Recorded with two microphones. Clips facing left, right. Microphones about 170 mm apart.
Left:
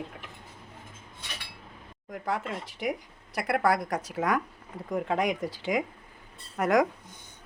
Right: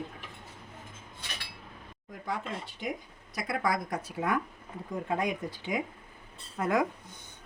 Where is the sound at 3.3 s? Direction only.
65° left (ahead or behind); by 5.9 s 90° left.